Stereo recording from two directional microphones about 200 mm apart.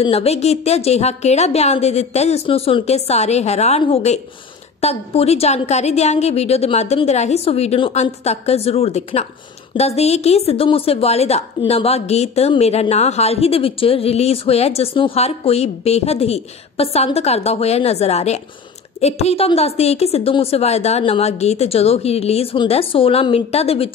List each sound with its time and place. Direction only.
0.0 s a woman's voice: 30° left (ahead or behind)